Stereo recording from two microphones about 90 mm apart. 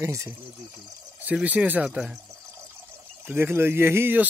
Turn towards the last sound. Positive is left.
turn(degrees=-25)  # may be behind; listen again after turning